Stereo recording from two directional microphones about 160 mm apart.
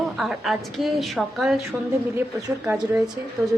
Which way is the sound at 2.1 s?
20° right (ahead or behind).